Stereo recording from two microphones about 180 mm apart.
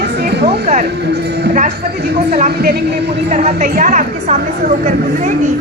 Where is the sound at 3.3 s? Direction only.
40° right (ahead or behind).